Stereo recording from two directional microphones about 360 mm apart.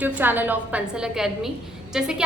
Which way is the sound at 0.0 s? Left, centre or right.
Centre.